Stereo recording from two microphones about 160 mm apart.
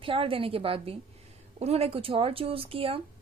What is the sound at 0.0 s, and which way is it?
A woman's voice, 35° right (ahead or behind).